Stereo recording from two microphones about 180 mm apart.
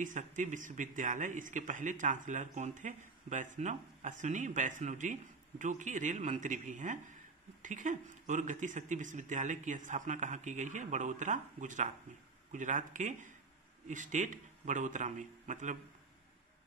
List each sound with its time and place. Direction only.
0.0 s speech: 45° right (ahead or behind)